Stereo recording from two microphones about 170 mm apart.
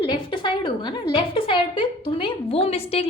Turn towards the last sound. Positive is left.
turn(degrees=35)  # may be behind; listen again after turning